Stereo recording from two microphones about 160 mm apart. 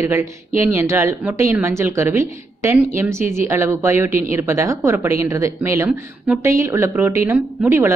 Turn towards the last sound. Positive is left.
turn(degrees=-15)  # may be behind; listen again after turning